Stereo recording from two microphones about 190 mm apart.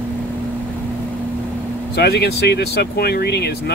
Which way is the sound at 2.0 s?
55° left (ahead or behind).